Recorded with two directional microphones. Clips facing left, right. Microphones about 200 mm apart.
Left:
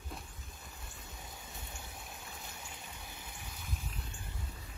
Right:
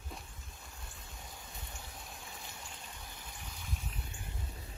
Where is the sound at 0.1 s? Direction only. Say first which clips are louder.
Left 1 dB; centre (ahead or behind).